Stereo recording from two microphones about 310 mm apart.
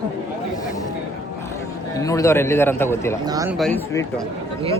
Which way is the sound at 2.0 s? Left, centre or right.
Centre.